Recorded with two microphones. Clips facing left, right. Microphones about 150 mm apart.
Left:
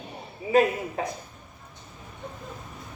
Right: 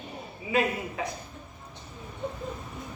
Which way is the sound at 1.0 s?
40° left (ahead or behind).